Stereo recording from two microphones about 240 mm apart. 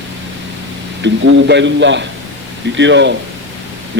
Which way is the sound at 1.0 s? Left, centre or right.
Right.